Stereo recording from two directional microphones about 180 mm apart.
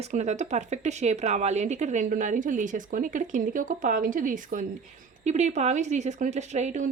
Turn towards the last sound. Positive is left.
turn(degrees=-40)  # may be behind; listen again after turning